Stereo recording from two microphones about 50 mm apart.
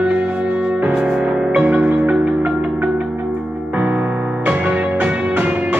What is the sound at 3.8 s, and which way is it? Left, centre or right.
Music, right.